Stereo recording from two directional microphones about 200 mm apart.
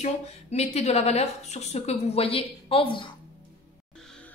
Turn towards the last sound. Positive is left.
turn(degrees=25)  # may be behind; listen again after turning